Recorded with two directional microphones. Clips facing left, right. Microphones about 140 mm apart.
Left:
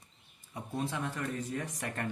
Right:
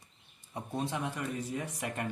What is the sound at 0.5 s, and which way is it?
Speech, 20° right (ahead or behind).